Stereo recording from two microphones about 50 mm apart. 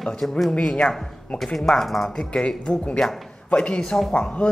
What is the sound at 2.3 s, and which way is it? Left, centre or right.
A man's voice, left.